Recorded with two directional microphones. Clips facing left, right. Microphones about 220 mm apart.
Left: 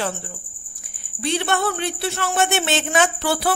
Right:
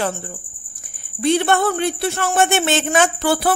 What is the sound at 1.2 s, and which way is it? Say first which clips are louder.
Speech: right 6 dB; 50° right (ahead or behind).